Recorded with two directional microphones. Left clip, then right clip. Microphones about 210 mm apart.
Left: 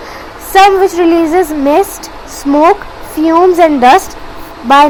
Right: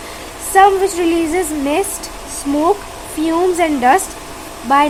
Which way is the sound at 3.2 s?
15° left (ahead or behind).